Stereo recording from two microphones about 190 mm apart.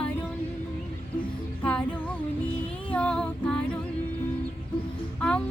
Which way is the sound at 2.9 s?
5° left (ahead or behind).